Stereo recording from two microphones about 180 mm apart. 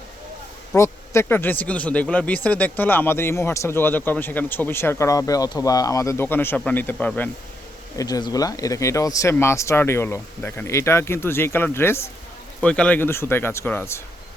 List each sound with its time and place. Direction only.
0.7 s speech: 15° left (ahead or behind)
7.9 s speech: 20° left (ahead or behind)